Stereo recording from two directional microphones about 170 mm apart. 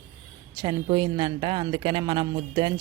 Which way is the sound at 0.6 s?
25° right (ahead or behind).